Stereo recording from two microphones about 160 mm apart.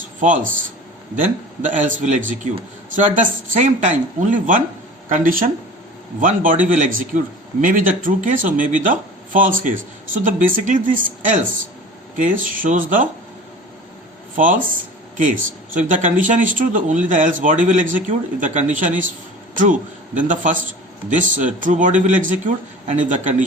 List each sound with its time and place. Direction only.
0.2 s speech: 55° right (ahead or behind)
1.6 s speech: 50° right (ahead or behind)
14.3 s a man's voice: 55° right (ahead or behind)